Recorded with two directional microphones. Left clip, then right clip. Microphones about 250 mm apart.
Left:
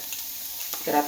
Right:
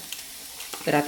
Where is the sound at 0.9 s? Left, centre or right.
Right.